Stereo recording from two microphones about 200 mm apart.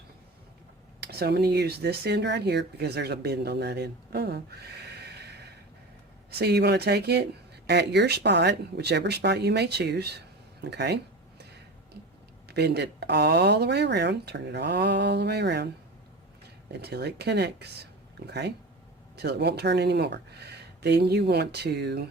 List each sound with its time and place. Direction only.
1.0 s speech: 55° right (ahead or behind)
12.5 s speech: 55° right (ahead or behind)
16.8 s speech: 55° right (ahead or behind)